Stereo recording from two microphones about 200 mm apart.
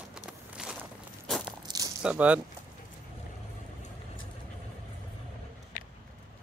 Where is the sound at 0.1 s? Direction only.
5° right (ahead or behind).